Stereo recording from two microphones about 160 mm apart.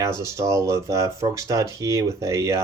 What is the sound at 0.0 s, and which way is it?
Speech, 20° right (ahead or behind).